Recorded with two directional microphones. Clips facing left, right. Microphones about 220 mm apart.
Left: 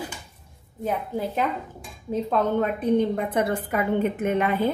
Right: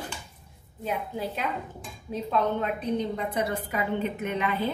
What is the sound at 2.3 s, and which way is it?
A woman's voice, 50° left (ahead or behind).